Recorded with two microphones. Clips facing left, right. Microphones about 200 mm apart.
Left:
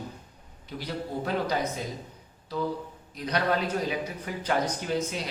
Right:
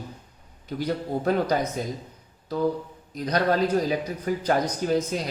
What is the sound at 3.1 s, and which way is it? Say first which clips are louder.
Speech: right 4 dB; 40° right (ahead or behind).